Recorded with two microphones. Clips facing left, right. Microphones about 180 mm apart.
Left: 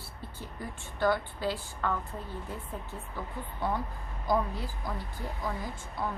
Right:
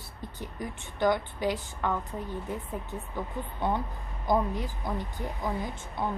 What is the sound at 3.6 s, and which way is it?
A woman's voice, 20° right (ahead or behind).